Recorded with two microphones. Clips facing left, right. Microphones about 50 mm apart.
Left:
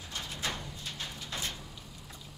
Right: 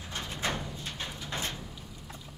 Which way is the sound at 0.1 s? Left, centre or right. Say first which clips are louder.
Right 4 dB; right.